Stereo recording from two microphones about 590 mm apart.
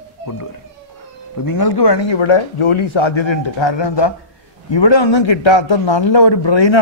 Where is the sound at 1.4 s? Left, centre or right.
Left.